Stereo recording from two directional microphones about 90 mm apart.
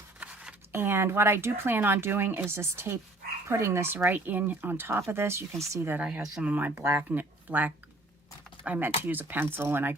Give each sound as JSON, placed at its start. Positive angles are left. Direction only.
{"t": 0.2, "sound": "a sound", "side_deg": -10}
{"t": 0.7, "sound": "speech", "side_deg": -25}
{"t": 6.0, "sound": "speech", "side_deg": -15}
{"t": 6.7, "sound": "speech", "side_deg": -30}